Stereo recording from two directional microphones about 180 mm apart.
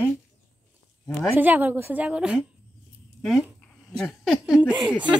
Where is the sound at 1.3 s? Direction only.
10° right (ahead or behind).